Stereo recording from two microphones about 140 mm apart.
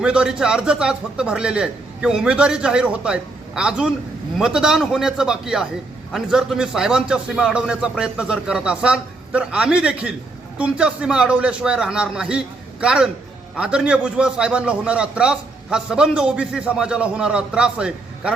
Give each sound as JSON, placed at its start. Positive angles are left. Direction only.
{"t": 0.0, "sound": "a man's voice", "side_deg": -5}